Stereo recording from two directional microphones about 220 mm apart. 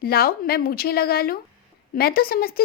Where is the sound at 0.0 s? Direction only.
45° left (ahead or behind).